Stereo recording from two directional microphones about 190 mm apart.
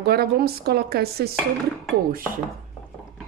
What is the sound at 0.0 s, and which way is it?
A woman's voice, 55° right (ahead or behind).